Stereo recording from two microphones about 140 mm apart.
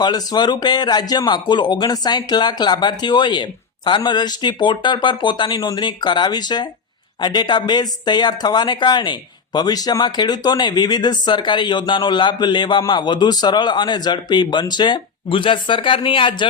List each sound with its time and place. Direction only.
0.0 s speech: 30° left (ahead or behind)